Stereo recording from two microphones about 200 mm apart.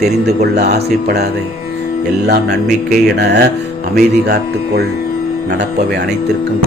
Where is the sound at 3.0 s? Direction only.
55° right (ahead or behind).